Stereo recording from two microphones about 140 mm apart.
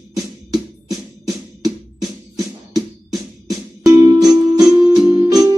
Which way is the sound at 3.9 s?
25° right (ahead or behind).